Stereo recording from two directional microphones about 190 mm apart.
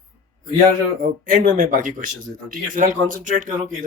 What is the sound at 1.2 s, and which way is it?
Speech, 45° right (ahead or behind).